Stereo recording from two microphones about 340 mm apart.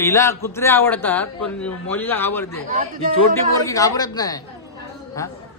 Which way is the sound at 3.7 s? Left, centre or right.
Centre.